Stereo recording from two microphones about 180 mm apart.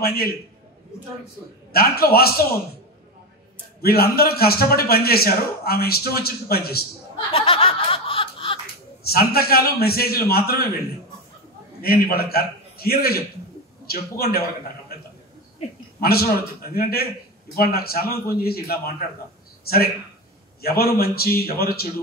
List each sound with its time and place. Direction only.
0.0 s a man's voice: 55° left (ahead or behind)
1.7 s a man's voice: 55° left (ahead or behind)
3.8 s a man's voice: 60° left (ahead or behind)
7.3 s snicker: 30° left (ahead or behind)
9.0 s a man's voice: 60° left (ahead or behind)
11.8 s a man's voice: 55° left (ahead or behind)
16.0 s a man's voice: 55° left (ahead or behind)